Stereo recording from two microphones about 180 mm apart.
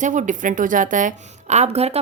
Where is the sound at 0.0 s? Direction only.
45° right (ahead or behind).